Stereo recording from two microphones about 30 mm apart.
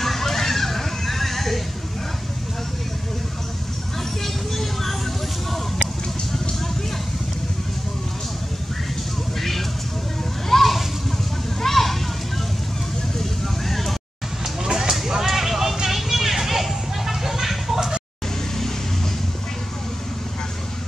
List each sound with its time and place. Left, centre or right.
0.0 s music: centre
4.2 s vehicle: centre
9.4 s vehicle: centre
10.5 s splash: centre
11.6 s a sound: centre
13.2 s vehicle: centre
14.4 s a sound: centre
15.9 s vehicle: centre